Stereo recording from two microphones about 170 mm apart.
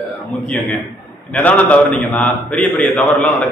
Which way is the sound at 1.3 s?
10° left (ahead or behind).